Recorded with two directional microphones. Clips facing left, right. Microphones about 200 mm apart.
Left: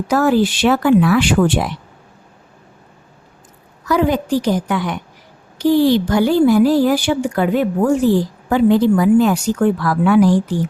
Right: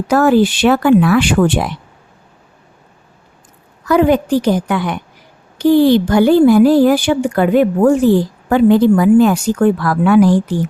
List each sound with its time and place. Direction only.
0.1 s a woman's voice: 60° right (ahead or behind)
3.8 s a woman's voice: 60° right (ahead or behind)